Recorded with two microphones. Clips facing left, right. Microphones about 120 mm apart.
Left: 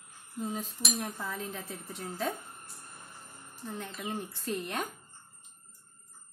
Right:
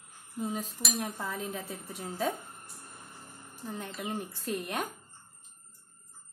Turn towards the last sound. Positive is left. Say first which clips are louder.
# right 1 dB
turn(degrees=-10)  # may be behind; listen again after turning